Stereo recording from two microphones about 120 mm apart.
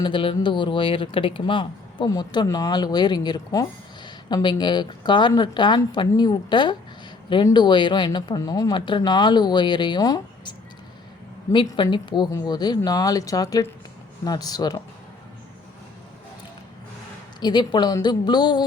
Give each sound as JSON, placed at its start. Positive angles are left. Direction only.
{"t": 0.0, "sound": "speech", "side_deg": 45}
{"t": 11.5, "sound": "speech", "side_deg": 40}
{"t": 17.4, "sound": "speech", "side_deg": 40}